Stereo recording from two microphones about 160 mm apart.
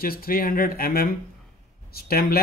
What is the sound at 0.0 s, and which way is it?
Speech, 70° left (ahead or behind).